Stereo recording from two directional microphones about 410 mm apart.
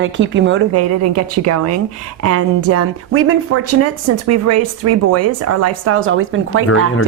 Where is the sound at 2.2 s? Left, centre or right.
Right.